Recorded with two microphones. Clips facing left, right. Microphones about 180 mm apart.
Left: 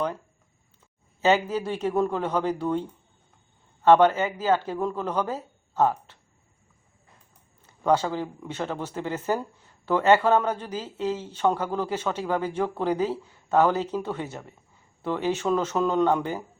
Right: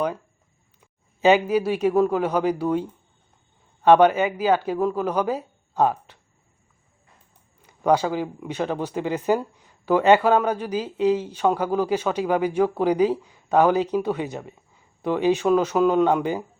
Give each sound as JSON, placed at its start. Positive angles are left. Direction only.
{"t": 0.8, "sound": "speech", "side_deg": -15}
{"t": 3.8, "sound": "speech", "side_deg": -15}
{"t": 7.6, "sound": "speech", "side_deg": -15}